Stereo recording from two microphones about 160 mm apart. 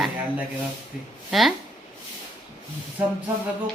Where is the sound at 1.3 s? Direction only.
Centre (ahead or behind).